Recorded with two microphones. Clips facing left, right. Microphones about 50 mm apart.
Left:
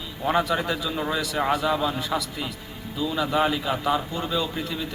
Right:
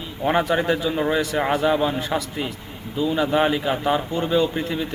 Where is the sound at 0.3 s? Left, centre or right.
Right.